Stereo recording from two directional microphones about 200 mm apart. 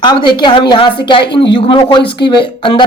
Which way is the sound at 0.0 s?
20° left (ahead or behind).